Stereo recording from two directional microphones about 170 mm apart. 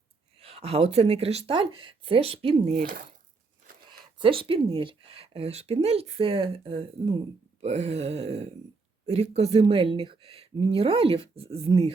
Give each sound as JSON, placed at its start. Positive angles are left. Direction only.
{"t": 0.3, "sound": "speech", "side_deg": -35}
{"t": 2.7, "sound": "speech", "side_deg": -55}
{"t": 3.8, "sound": "speech", "side_deg": -30}